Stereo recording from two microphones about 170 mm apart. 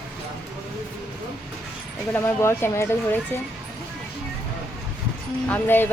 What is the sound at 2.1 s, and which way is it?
Speech, 15° left (ahead or behind).